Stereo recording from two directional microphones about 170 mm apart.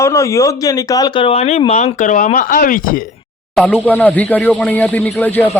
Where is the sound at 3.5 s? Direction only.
10° left (ahead or behind).